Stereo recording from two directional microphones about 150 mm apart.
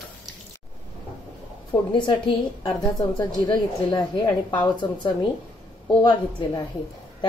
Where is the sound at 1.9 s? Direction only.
30° left (ahead or behind).